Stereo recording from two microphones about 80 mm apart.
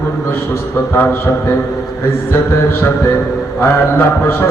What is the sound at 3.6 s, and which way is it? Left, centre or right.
Mantra, left.